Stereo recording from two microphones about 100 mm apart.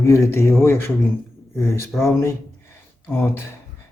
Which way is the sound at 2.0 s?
30° left (ahead or behind).